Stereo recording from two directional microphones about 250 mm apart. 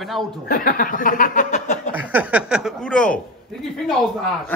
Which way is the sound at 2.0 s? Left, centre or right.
Centre.